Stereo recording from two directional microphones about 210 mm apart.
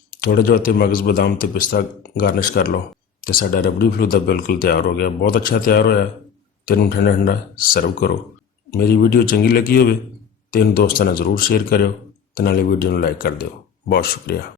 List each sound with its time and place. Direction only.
0.2 s speech: 45° left (ahead or behind)